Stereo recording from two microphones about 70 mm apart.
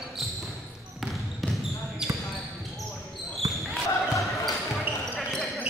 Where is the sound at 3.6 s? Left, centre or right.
Centre.